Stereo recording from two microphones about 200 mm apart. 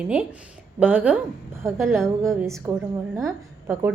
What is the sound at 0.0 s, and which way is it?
A woman's voice, 5° right (ahead or behind).